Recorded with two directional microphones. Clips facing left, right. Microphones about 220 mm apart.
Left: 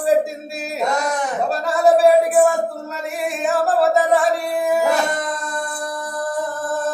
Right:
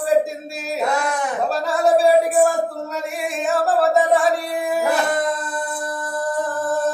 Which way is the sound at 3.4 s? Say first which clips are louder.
Left 1 dB; centre (ahead or behind).